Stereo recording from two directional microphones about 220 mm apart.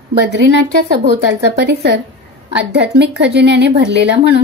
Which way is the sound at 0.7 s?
40° right (ahead or behind).